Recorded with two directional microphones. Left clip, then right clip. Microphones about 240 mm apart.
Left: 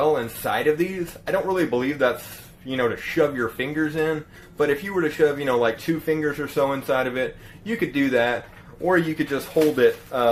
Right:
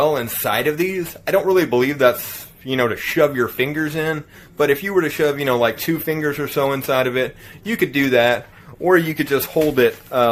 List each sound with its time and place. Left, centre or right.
0.0 s speech: right